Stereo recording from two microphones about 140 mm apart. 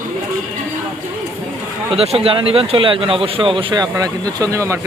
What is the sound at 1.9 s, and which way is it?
A man's voice, 45° right (ahead or behind).